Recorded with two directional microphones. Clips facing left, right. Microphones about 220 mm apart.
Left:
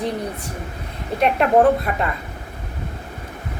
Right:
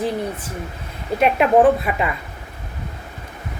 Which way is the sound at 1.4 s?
5° right (ahead or behind).